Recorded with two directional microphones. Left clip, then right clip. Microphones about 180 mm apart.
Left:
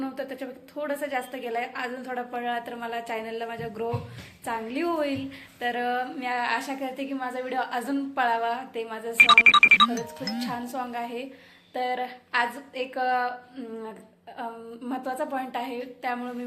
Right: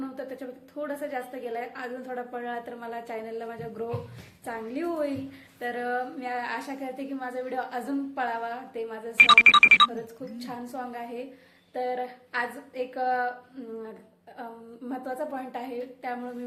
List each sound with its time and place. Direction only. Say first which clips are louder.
0.0 s a sound: left 3 dB; centre (ahead or behind)
0.8 s a woman's voice: left 3 dB; centre (ahead or behind)
14.8 s a woman's voice: left 3 dB; centre (ahead or behind)